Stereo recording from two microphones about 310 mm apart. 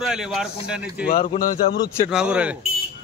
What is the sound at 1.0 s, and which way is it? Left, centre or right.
Speech, left.